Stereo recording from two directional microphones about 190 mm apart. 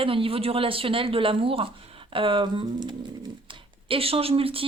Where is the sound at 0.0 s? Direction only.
30° right (ahead or behind).